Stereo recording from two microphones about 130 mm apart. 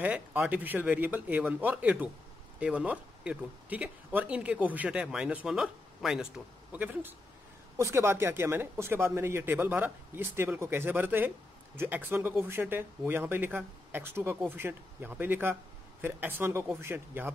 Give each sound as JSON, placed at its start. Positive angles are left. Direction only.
{"t": 0.0, "sound": "speech", "side_deg": -10}